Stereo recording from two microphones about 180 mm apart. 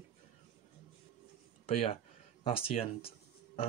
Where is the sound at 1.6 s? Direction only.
35° left (ahead or behind).